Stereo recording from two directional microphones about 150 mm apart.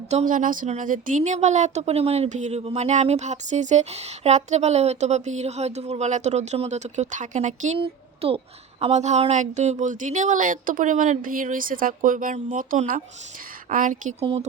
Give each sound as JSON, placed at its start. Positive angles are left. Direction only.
{"t": 0.1, "sound": "speech", "side_deg": -55}
{"t": 7.8, "sound": "speech", "side_deg": -40}
{"t": 14.2, "sound": "speech", "side_deg": -40}